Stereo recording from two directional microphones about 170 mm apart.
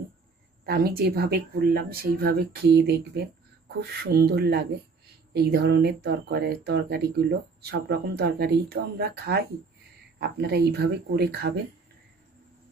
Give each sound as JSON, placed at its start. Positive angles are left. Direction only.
{"t": 0.7, "sound": "speech", "side_deg": -65}